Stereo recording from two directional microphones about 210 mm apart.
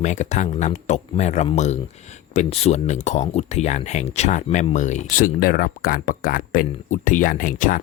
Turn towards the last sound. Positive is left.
turn(degrees=40)  # may be behind; listen again after turning